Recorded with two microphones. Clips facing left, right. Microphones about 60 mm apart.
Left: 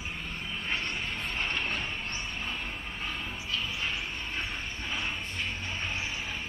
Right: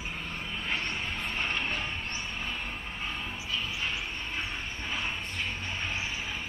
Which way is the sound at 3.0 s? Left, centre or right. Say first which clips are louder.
Even; centre.